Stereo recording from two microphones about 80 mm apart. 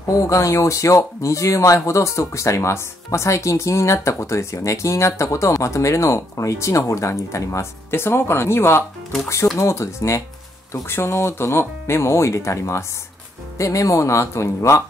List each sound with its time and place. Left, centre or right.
0.0 s speech: left